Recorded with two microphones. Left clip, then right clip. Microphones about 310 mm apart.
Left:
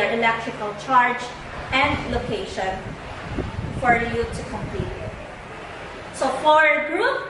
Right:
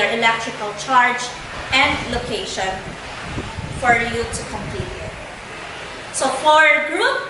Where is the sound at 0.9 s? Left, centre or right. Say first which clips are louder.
Right 2 dB; centre.